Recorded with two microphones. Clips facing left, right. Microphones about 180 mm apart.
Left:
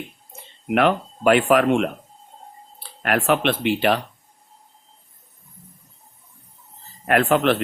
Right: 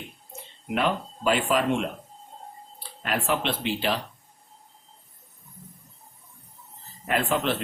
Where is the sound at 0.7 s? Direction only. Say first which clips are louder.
Left 7 dB; 65° left (ahead or behind).